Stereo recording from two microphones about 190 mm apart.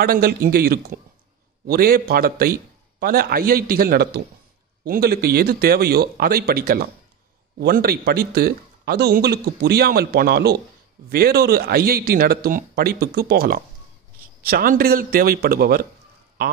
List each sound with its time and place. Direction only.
0.0 s a man's voice: 55° right (ahead or behind)